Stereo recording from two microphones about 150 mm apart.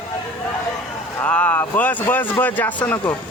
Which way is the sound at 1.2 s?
10° left (ahead or behind).